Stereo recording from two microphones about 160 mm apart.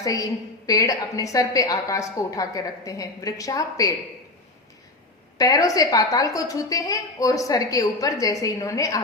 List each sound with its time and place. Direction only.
0.0 s a woman's voice: 20° left (ahead or behind)
5.4 s a woman's voice: 20° left (ahead or behind)